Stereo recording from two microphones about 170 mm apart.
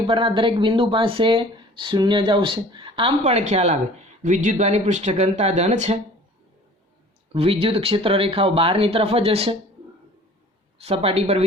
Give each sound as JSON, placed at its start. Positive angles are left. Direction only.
{"t": 0.1, "sound": "speech", "side_deg": -30}
{"t": 7.3, "sound": "speech", "side_deg": -35}
{"t": 10.8, "sound": "speech", "side_deg": -35}